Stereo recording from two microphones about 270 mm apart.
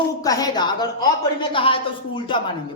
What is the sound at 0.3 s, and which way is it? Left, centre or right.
Speech, centre.